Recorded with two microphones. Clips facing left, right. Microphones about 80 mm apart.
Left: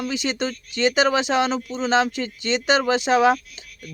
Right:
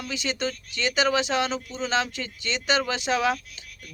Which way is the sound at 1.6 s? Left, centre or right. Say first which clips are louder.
Left 7 dB; left.